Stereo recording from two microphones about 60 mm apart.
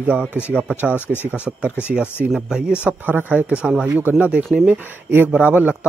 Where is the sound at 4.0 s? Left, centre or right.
Right.